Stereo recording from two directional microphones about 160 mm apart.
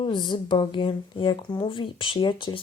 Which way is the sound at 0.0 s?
30° left (ahead or behind).